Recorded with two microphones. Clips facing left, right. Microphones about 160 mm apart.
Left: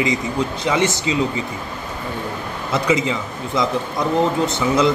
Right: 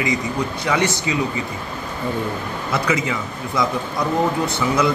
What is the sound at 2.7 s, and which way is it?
Speech, 20° left (ahead or behind).